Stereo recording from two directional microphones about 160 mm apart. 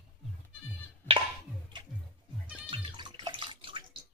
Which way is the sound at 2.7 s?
30° right (ahead or behind).